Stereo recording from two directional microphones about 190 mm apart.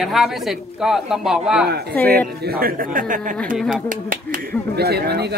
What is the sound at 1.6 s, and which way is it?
A man's voice, 55° right (ahead or behind).